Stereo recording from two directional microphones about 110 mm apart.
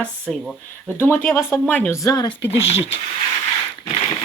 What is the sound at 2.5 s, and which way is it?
Speech, 65° left (ahead or behind).